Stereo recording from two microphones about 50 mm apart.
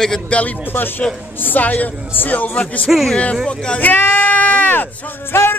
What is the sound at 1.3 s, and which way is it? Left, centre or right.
Speech, left.